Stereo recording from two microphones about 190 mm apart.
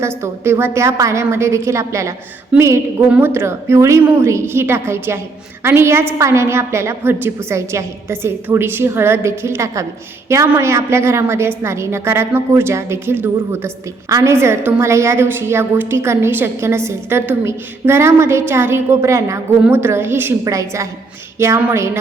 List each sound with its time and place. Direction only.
0.0 s a woman's voice: 15° right (ahead or behind)